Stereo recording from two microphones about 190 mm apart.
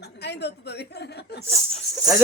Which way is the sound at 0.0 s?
60° left (ahead or behind).